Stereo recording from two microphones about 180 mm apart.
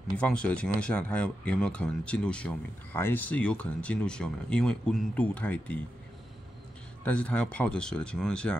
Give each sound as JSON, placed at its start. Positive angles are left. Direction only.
{"t": 0.2, "sound": "speech", "side_deg": 5}
{"t": 7.1, "sound": "speech", "side_deg": 5}